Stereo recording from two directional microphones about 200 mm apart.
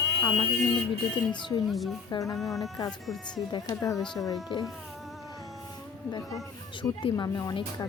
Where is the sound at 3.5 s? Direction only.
15° left (ahead or behind).